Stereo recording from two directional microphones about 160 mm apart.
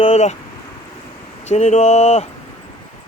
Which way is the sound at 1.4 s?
45° left (ahead or behind).